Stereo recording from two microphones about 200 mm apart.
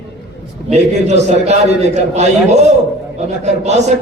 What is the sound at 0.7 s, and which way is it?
A man's voice, 35° right (ahead or behind).